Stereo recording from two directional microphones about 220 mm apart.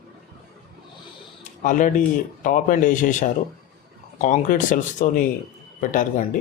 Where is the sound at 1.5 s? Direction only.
35° left (ahead or behind).